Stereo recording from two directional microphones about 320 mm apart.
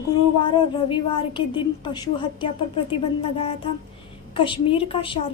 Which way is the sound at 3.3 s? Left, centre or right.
Centre.